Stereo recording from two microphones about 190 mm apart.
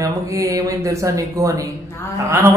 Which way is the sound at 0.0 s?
15° right (ahead or behind).